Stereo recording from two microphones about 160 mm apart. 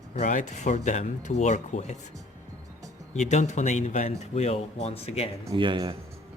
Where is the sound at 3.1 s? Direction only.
50° left (ahead or behind).